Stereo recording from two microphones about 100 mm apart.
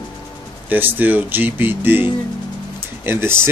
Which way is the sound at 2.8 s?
25° right (ahead or behind).